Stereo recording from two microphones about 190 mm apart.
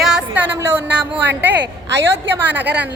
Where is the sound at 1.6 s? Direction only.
65° right (ahead or behind).